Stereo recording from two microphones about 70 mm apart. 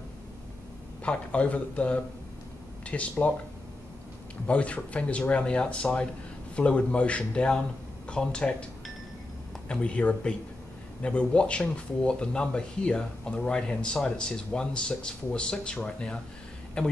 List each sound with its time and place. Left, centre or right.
1.0 s a man's voice: centre
4.5 s speech: centre
9.7 s speech: centre